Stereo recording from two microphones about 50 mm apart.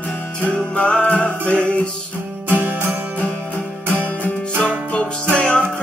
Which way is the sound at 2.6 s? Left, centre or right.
Right.